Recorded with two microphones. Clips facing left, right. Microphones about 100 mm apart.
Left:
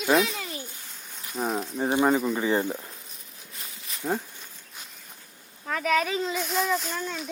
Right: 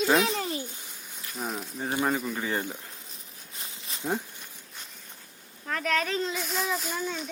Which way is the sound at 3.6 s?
30° right (ahead or behind).